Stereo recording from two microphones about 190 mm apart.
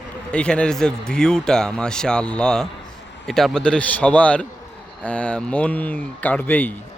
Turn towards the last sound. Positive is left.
turn(degrees=10)  # may be behind; listen again after turning